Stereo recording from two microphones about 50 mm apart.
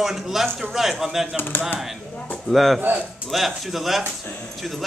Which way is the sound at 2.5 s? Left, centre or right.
Centre.